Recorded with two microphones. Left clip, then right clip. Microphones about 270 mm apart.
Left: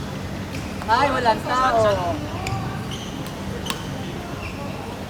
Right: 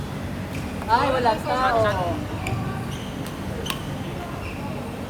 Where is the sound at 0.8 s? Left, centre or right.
Left.